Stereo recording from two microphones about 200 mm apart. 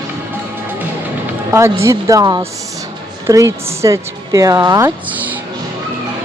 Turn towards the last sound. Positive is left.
turn(degrees=-10)  # may be behind; listen again after turning